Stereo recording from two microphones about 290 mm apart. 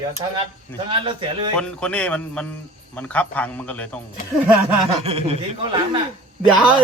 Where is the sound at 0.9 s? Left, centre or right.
Centre.